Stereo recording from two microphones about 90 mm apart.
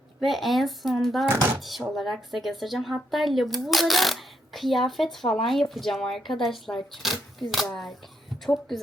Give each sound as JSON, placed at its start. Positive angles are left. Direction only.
{"t": 0.2, "sound": "speech", "side_deg": 0}
{"t": 1.3, "sound": "speech", "side_deg": -30}
{"t": 1.5, "sound": "speech", "side_deg": 0}